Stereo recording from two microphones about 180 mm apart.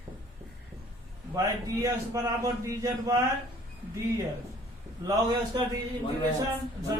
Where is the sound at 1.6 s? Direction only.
20° right (ahead or behind).